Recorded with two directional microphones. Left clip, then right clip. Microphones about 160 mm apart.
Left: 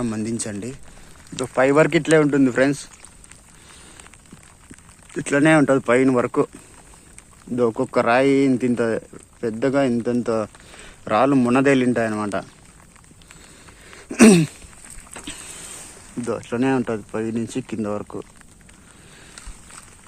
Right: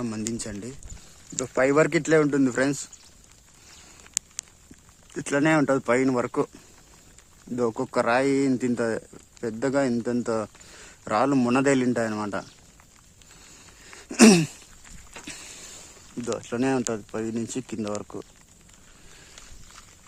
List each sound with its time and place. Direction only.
0.0 s speech: 10° right (ahead or behind)
1.4 s speech: 20° right (ahead or behind)
5.1 s speech: 10° right (ahead or behind)
7.5 s speech: 10° right (ahead or behind)
13.9 s cough: 20° right (ahead or behind)
15.2 s vehicle: 10° right (ahead or behind)
16.2 s speech: 15° right (ahead or behind)